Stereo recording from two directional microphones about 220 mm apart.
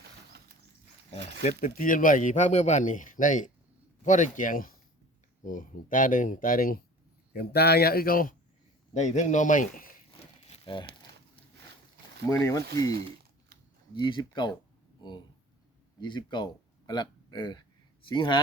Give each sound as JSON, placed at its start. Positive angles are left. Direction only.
{"t": 0.0, "sound": "a sound", "side_deg": -50}
{"t": 1.2, "sound": "speech", "side_deg": -50}
{"t": 1.5, "sound": "a man's voice", "side_deg": 40}
{"t": 10.1, "sound": "crumpling", "side_deg": 25}
{"t": 12.3, "sound": "speech", "side_deg": 15}
{"t": 14.0, "sound": "speech", "side_deg": 20}